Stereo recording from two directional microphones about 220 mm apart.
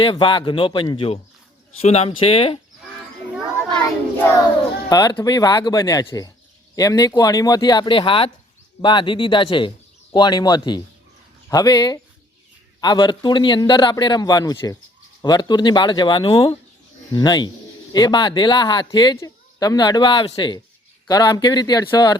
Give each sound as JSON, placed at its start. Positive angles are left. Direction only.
{"t": 0.0, "sound": "speech", "side_deg": 20}
{"t": 4.9, "sound": "speech", "side_deg": 20}